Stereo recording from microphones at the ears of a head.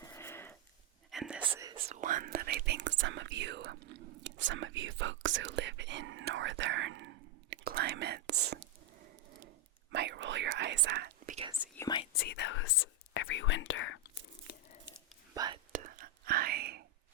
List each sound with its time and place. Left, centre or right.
1.5 s whispering: right
11.5 s whispering: left
15.3 s whispering: right